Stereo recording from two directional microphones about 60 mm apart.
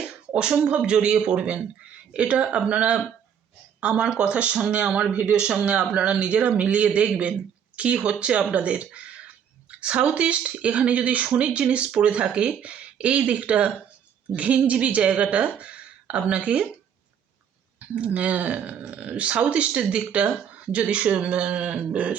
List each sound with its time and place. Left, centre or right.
0.0 s a man's voice: centre
17.7 s speech: right